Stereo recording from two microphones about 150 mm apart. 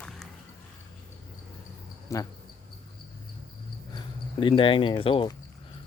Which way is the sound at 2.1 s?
20° left (ahead or behind).